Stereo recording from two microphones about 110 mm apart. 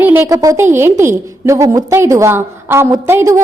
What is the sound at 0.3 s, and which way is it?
A woman's voice, 30° right (ahead or behind).